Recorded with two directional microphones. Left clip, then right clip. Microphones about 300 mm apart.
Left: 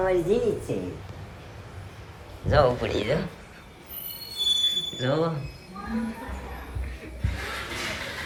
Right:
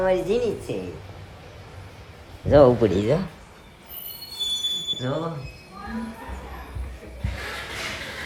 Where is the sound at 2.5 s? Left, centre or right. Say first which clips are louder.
Right 6 dB; right.